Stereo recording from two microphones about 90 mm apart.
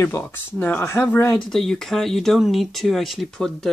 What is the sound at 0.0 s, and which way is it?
Speech, 25° left (ahead or behind).